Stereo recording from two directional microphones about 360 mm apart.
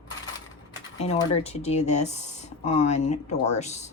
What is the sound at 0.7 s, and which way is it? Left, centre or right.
Speech, centre.